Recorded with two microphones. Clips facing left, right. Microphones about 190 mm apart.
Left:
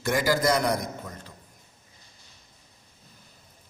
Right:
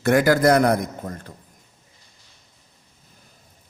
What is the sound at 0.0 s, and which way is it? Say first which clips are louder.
A man's voice: right 7 dB; 60° right (ahead or behind).